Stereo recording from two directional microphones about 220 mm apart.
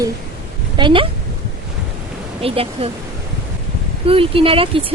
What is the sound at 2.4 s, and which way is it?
Speech, 25° right (ahead or behind).